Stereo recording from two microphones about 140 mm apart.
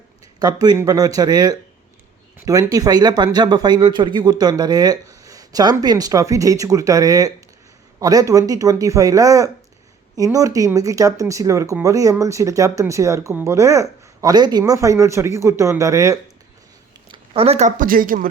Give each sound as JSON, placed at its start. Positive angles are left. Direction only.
{"t": 0.3, "sound": "a man's voice", "side_deg": -30}
{"t": 17.1, "sound": "speech", "side_deg": -45}